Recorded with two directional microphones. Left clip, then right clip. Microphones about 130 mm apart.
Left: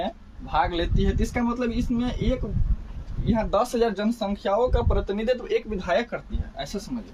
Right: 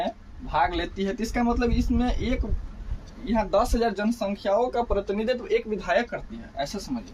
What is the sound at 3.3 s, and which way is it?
Speech, 45° left (ahead or behind).